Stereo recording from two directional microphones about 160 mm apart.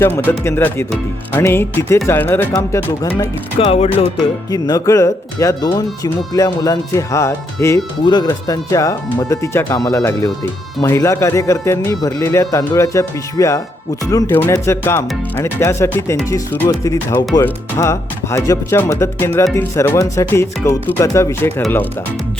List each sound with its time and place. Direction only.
0.0 s speech: 10° left (ahead or behind)
3.6 s speech: 35° left (ahead or behind)
4.5 s speech: 25° left (ahead or behind)
8.0 s speech: 25° left (ahead or behind)